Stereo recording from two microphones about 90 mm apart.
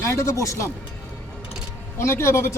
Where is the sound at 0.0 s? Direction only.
35° left (ahead or behind).